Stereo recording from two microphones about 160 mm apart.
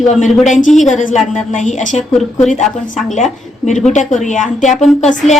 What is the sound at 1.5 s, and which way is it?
Speech, 50° left (ahead or behind).